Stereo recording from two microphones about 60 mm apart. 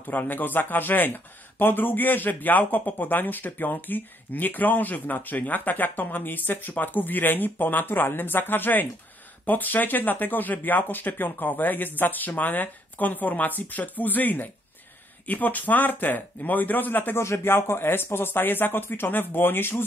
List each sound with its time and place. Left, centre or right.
0.0 s speech: left
17.2 s speech: left